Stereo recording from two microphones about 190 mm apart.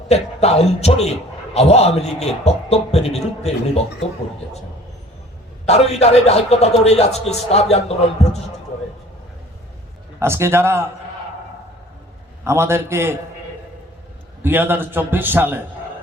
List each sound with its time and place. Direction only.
0.1 s a man's voice: 35° left (ahead or behind)
5.6 s a man's voice: 35° left (ahead or behind)
10.2 s a man's voice: 15° right (ahead or behind)
12.5 s a man's voice: 15° right (ahead or behind)
14.4 s a man's voice: 10° right (ahead or behind)